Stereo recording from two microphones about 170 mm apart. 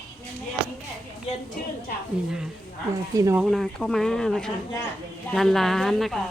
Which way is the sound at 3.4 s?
Centre (ahead or behind).